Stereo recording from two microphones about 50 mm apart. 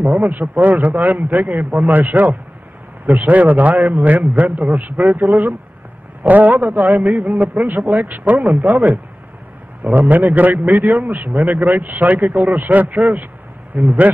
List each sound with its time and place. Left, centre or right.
0.1 s a man's voice: right
6.9 s a man's voice: right
7.5 s a man's voice: right
8.3 s a man's voice: right